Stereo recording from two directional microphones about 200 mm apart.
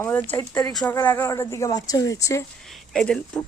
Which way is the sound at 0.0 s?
10° left (ahead or behind).